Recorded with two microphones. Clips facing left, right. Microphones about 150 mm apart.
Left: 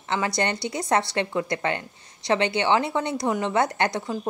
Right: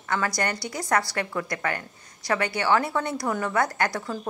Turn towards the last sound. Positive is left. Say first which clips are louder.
# left 2 dB
turn(degrees=20)  # may be behind; listen again after turning